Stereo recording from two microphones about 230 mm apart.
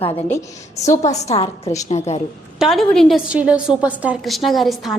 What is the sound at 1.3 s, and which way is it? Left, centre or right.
Speech, left.